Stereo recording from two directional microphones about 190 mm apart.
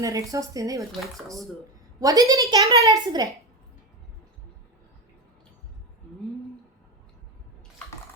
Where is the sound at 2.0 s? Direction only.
20° right (ahead or behind).